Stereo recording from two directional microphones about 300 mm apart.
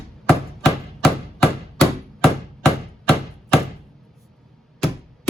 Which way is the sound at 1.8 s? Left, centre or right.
Centre.